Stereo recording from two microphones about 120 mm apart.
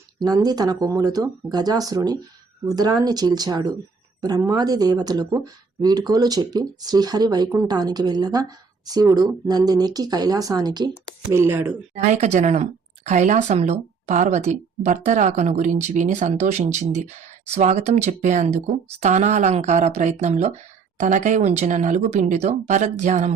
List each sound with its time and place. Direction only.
0.2 s speech: 35° right (ahead or behind)
11.3 s speech: 20° right (ahead or behind)
12.1 s a woman's voice: 75° right (ahead or behind)
13.1 s a woman's voice: 85° right
18.4 s a woman's voice: 70° right (ahead or behind)
21.0 s speech: 90° right